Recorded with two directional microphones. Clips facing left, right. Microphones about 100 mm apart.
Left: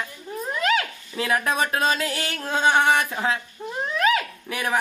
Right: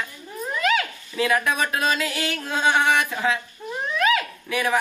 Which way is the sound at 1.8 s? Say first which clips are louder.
Even; 35° left (ahead or behind).